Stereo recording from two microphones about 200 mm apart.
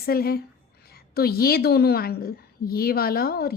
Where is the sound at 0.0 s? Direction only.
50° left (ahead or behind).